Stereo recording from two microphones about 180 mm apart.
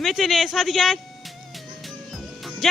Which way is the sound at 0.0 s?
Centre (ahead or behind).